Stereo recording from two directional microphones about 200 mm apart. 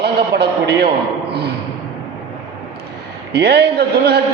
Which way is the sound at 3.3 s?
55° right (ahead or behind).